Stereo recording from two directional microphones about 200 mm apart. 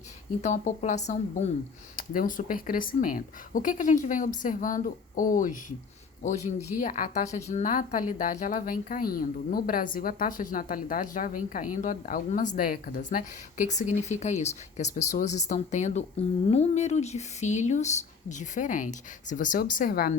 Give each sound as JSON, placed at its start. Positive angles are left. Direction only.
{"t": 0.4, "sound": "a woman's voice", "side_deg": 35}